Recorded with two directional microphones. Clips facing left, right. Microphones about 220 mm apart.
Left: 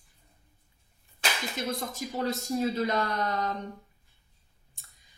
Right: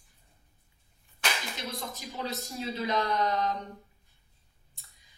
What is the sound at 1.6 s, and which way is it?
Speech, 45° left (ahead or behind).